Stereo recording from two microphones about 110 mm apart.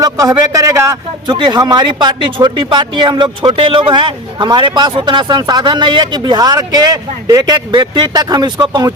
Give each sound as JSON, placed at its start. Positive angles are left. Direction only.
{"t": 0.0, "sound": "speech", "side_deg": -35}
{"t": 1.3, "sound": "speech", "side_deg": -45}